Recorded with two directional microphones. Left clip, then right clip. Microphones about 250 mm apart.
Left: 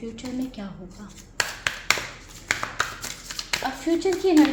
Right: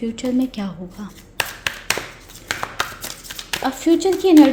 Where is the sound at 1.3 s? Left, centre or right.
Right.